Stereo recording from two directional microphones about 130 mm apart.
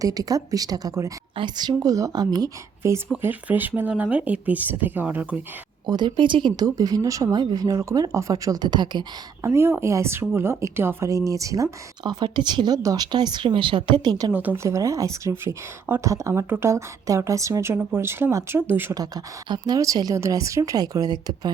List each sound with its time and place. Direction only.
0.0 s speech: 30° right (ahead or behind)
3.1 s speech: 15° right (ahead or behind)
5.8 s speech: 35° right (ahead or behind)
9.5 s speech: 20° right (ahead or behind)
14.3 s speech: 15° right (ahead or behind)
18.9 s speech: 30° right (ahead or behind)